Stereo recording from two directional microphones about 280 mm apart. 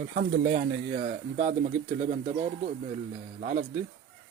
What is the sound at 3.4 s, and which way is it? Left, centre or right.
Speech, right.